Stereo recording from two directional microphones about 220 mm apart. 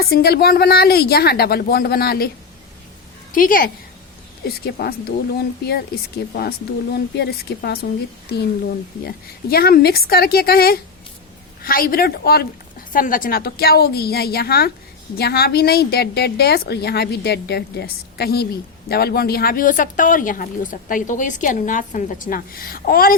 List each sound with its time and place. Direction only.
0.0 s a woman's voice: 45° left (ahead or behind)
3.3 s a woman's voice: 40° left (ahead or behind)
6.9 s a woman's voice: 45° left (ahead or behind)
9.0 s a woman's voice: 45° left (ahead or behind)